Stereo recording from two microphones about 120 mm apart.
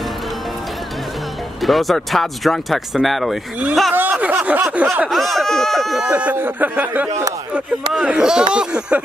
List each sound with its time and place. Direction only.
1.6 s speech: centre (ahead or behind)
3.9 s speech: 15° right (ahead or behind)
5.1 s speech: centre (ahead or behind)
6.0 s speech: 15° right (ahead or behind)
7.1 s speech: 30° right (ahead or behind)
7.9 s speech: 5° right (ahead or behind)